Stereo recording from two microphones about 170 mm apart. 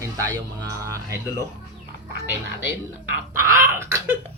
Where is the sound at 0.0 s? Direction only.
20° right (ahead or behind).